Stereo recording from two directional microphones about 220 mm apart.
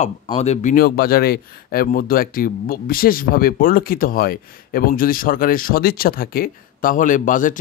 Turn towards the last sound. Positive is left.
turn(degrees=35)  # may be behind; listen again after turning